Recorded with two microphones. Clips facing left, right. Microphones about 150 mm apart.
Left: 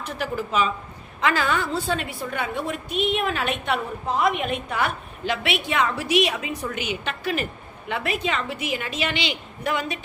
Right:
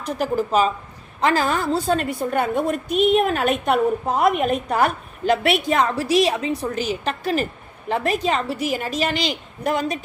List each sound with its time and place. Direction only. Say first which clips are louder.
0.0 s a woman's voice: right 6 dB; 40° right (ahead or behind)